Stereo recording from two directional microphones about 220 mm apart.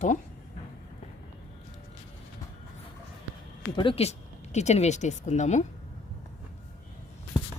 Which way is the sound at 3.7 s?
20° left (ahead or behind).